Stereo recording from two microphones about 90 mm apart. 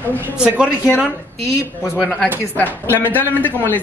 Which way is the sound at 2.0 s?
10° left (ahead or behind).